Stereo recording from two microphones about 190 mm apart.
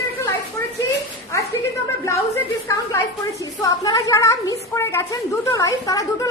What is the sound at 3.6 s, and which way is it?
A woman's voice, 20° left (ahead or behind).